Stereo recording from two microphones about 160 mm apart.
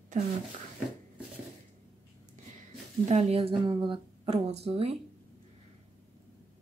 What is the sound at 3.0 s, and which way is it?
Speech, 45° right (ahead or behind).